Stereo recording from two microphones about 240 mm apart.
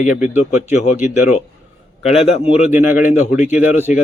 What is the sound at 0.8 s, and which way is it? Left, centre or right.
Speech, left.